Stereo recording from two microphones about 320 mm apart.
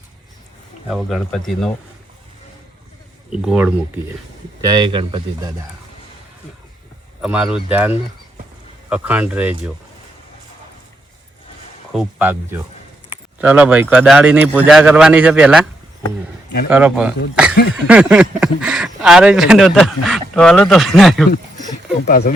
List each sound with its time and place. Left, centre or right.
0.9 s speech: centre
3.2 s speech: centre
4.6 s a man's voice: centre
7.2 s speech: centre
11.9 s speech: centre
16.0 s a sound: left
16.6 s speech: centre
22.0 s speech: left